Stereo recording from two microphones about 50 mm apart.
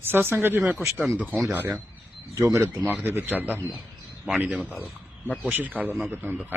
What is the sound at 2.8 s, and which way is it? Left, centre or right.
Speech, right.